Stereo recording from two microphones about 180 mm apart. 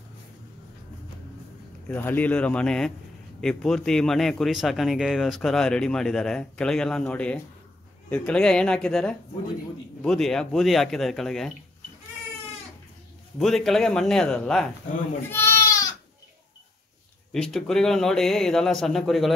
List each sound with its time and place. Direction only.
2.0 s a man's voice: 10° left (ahead or behind)
13.4 s a man's voice: centre (ahead or behind)
15.2 s goat: 15° left (ahead or behind)
17.3 s a man's voice: centre (ahead or behind)